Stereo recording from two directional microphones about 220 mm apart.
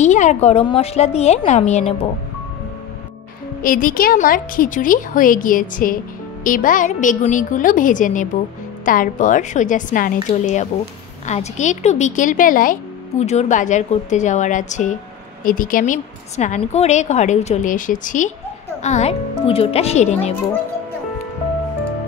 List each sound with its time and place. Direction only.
0.0 s a woman's voice: 30° left (ahead or behind)
3.6 s a woman's voice: 40° left (ahead or behind)